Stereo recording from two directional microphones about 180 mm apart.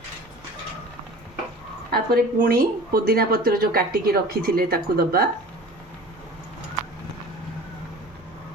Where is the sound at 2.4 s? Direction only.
60° right (ahead or behind).